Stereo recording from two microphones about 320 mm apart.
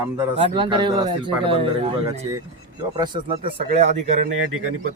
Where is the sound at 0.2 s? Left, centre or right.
Centre.